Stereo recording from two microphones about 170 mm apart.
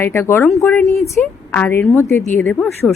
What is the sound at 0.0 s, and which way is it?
A woman's voice, 15° left (ahead or behind).